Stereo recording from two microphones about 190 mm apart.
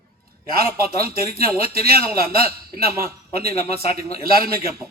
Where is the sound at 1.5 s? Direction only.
50° right (ahead or behind).